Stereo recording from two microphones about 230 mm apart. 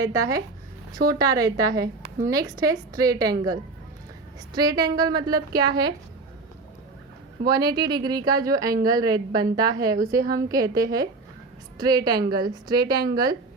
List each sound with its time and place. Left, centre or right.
0.0 s a woman's voice: centre
7.4 s a woman's voice: centre